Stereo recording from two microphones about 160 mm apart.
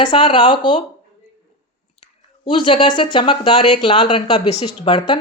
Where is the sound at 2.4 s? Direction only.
30° left (ahead or behind).